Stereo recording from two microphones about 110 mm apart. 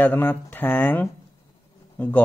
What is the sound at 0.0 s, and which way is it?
Speech, 15° left (ahead or behind).